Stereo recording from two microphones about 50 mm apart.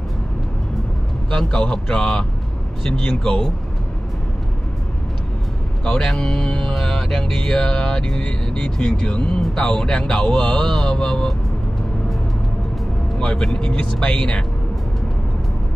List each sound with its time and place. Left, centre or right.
1.3 s speech: centre
6.0 s speech: centre
13.2 s speech: centre